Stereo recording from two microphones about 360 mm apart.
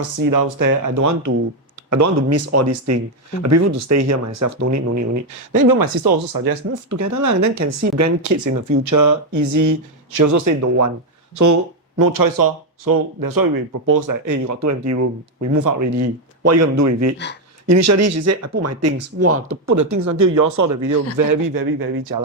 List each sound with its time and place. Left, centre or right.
0.3 s speech: right
5.5 s speech: right
7.0 s speech: right
11.9 s speech: right
19.7 s speech: right